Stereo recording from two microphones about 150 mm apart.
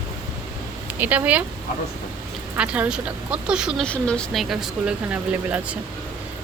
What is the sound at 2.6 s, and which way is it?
Speech, 5° right (ahead or behind).